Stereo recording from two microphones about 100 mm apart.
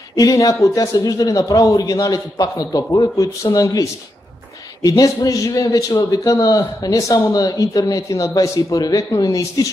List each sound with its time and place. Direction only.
0.1 s a man's voice: 35° left (ahead or behind)